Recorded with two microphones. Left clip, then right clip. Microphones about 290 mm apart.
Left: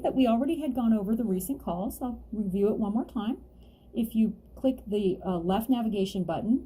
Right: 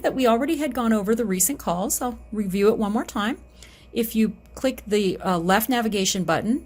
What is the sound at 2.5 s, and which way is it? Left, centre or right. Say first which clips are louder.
Speech: right 7 dB; right.